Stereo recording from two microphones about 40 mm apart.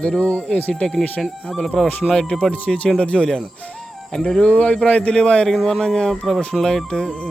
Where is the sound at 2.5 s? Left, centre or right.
Left.